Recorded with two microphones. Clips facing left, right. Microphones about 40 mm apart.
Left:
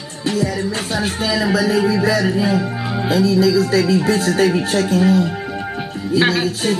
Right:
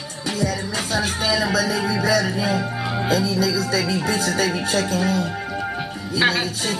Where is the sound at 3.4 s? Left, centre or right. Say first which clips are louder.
Left 7 dB; left.